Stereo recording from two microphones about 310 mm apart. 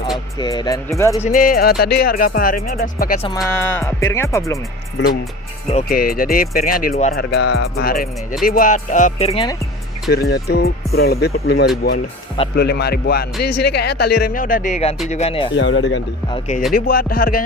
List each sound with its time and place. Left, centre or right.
0.3 s speech: centre
1.2 s speech: left
3.4 s speech: centre
5.7 s speech: left
7.3 s music: left
7.9 s speech: left
10.1 s speech: left
15.5 s speech: left
16.3 s speech: left